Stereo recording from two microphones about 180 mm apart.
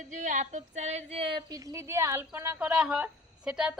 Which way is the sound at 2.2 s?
10° right (ahead or behind).